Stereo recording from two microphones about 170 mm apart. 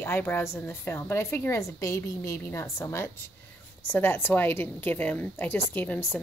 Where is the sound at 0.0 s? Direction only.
10° left (ahead or behind).